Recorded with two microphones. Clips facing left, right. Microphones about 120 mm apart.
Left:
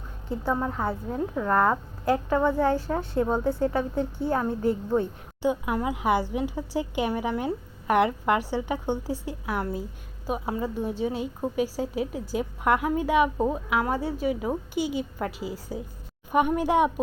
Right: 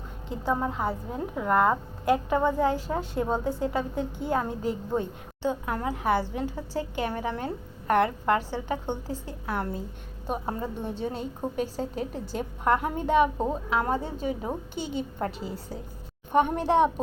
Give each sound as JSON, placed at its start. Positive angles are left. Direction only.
{"t": 0.3, "sound": "a woman's voice", "side_deg": -15}
{"t": 5.4, "sound": "a woman's voice", "side_deg": 15}